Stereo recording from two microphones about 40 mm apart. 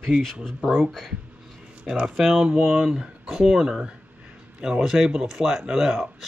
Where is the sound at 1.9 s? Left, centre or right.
Centre.